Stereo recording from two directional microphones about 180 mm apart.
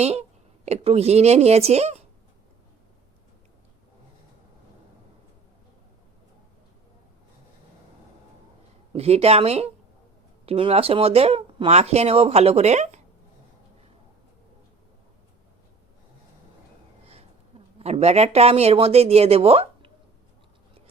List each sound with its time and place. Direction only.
0.0 s speech: 35° right (ahead or behind)
8.9 s speech: 35° right (ahead or behind)
17.7 s speech: 35° right (ahead or behind)